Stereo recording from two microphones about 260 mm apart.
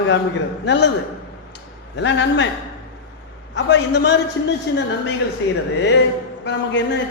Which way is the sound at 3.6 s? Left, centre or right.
Left.